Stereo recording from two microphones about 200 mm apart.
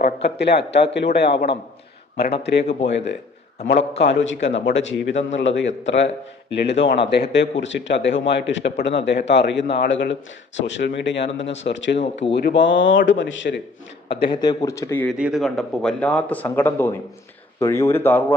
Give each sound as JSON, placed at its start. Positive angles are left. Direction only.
{"t": 0.3, "sound": "a man's voice", "side_deg": 55}
{"t": 2.2, "sound": "a man's voice", "side_deg": 30}
{"t": 2.8, "sound": "a man's voice", "side_deg": 65}
{"t": 14.3, "sound": "speech", "side_deg": 20}
{"t": 15.2, "sound": "speech", "side_deg": 0}